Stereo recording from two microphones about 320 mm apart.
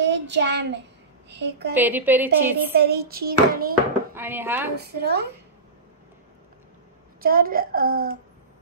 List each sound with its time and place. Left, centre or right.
0.0 s a child's voice: right
1.8 s a woman's voice: centre
2.7 s hands: right
4.1 s speech: centre
4.7 s hands: right
7.2 s hands: right